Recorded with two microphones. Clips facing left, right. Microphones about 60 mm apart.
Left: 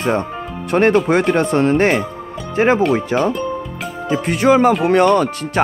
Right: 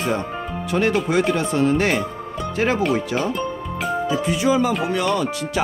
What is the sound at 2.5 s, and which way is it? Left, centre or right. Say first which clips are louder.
Speech: left 6 dB; left.